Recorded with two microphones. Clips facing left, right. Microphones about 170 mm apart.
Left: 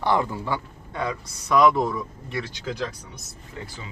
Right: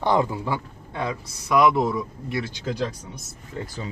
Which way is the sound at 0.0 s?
20° right (ahead or behind).